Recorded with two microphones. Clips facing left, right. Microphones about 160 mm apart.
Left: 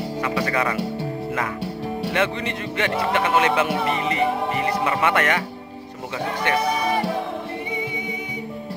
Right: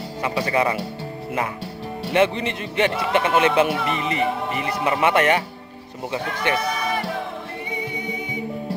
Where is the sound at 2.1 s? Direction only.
25° right (ahead or behind).